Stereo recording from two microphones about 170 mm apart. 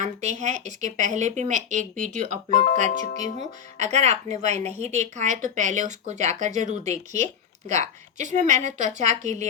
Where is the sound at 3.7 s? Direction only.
40° right (ahead or behind).